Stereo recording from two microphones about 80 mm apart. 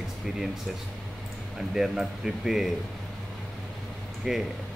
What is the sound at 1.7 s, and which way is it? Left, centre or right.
Speech, centre.